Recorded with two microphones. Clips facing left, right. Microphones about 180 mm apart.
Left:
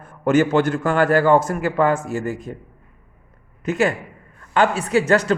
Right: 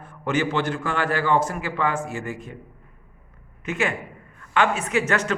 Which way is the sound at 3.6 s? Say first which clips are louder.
Left 6 dB; 40° left (ahead or behind).